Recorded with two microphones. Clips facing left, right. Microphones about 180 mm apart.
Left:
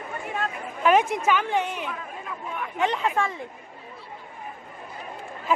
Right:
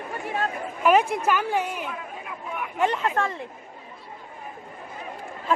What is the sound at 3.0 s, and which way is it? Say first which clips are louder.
Speech: even; 5° left (ahead or behind).